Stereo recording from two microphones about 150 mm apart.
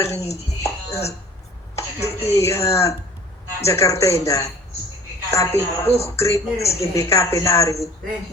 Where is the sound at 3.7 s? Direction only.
20° left (ahead or behind).